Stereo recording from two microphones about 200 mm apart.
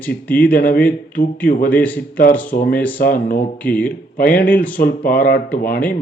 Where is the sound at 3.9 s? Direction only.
45° left (ahead or behind).